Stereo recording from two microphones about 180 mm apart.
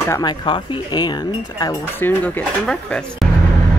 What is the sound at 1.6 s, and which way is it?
Speech, 10° left (ahead or behind).